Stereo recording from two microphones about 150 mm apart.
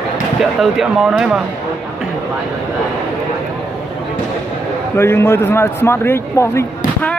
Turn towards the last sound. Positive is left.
turn(degrees=15)  # may be behind; listen again after turning